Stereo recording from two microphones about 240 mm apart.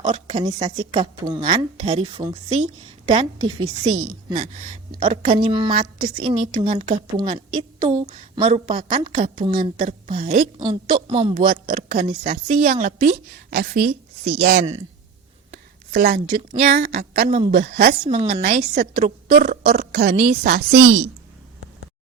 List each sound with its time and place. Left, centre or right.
0.0 s a woman's voice: right
10.6 s a woman's voice: centre
11.4 s a woman's voice: right
15.5 s a sound: right
16.8 s a woman's voice: right
17.2 s a woman's voice: centre
17.5 s a woman's voice: right
18.0 s a woman's voice: right
18.4 s a woman's voice: right